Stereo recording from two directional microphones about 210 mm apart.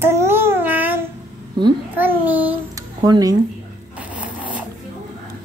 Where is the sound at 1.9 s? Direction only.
10° right (ahead or behind).